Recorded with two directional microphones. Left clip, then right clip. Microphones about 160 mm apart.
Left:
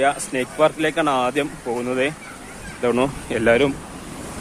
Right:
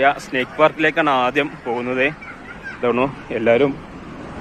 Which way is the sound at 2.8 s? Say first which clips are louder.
Right 1 dB; 30° left (ahead or behind).